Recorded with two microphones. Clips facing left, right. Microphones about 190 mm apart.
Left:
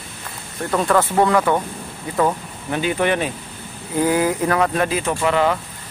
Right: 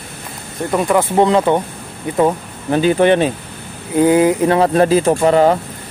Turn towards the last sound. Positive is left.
turn(degrees=-40)  # may be behind; listen again after turning